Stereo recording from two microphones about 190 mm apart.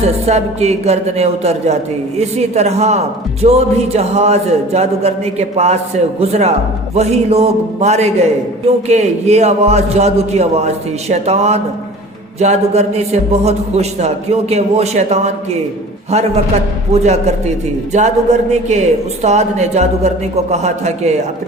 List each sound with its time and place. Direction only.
0.3 s a woman's voice: 35° right (ahead or behind)